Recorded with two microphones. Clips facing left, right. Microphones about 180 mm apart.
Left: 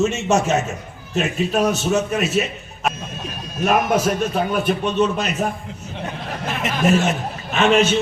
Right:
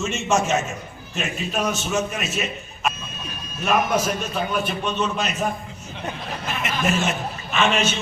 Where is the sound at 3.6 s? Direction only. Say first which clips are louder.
Left 3 dB; 55° left (ahead or behind).